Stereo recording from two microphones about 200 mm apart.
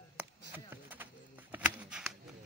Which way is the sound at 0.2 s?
10° right (ahead or behind).